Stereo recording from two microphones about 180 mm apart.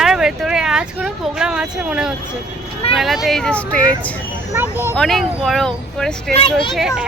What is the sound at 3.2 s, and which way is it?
Speech, 5° left (ahead or behind).